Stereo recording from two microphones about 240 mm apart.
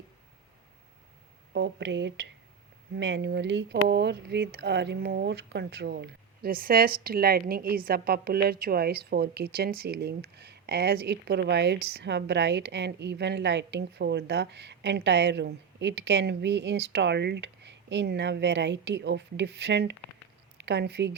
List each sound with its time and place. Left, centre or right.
1.5 s a woman's voice: right